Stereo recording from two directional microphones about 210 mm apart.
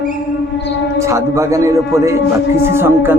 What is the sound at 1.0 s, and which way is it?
Speech, 15° right (ahead or behind).